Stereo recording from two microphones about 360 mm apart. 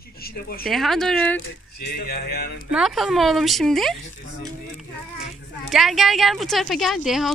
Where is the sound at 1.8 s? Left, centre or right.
Left.